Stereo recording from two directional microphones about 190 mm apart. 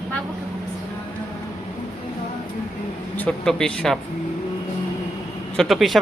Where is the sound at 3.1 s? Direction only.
5° left (ahead or behind).